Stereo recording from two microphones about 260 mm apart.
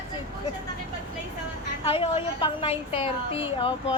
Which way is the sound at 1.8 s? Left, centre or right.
Left.